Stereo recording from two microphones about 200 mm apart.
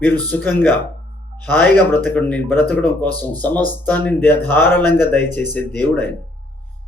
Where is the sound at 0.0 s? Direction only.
10° left (ahead or behind).